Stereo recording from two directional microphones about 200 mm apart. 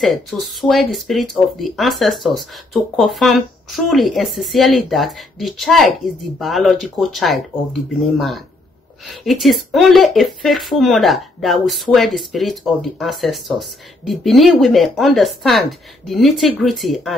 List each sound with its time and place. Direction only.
0.0 s speech: centre (ahead or behind)
9.1 s speech: centre (ahead or behind)